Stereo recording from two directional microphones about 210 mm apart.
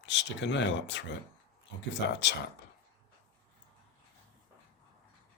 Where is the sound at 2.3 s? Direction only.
55° left (ahead or behind).